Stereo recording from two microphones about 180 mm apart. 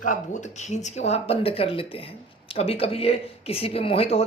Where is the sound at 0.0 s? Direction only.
45° left (ahead or behind).